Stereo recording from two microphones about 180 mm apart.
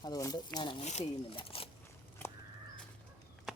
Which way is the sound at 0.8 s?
40° left (ahead or behind).